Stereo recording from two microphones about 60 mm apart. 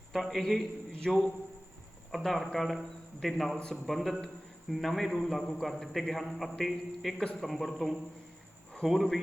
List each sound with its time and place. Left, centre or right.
0.1 s a man's voice: centre